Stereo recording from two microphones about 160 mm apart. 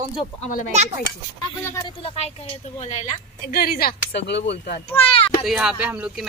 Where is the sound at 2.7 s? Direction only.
45° left (ahead or behind).